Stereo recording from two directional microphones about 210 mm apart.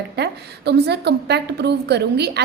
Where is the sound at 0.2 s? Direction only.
50° right (ahead or behind).